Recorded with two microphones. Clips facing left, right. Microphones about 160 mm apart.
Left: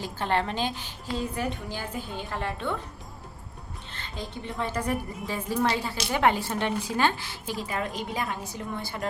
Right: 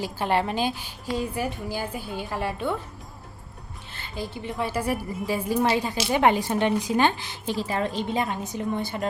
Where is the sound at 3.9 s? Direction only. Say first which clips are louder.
Right 4 dB; 5° right (ahead or behind).